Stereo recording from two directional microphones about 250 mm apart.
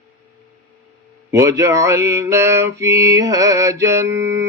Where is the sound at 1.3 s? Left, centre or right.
Centre.